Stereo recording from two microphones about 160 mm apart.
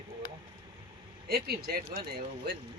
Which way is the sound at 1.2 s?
75° right (ahead or behind).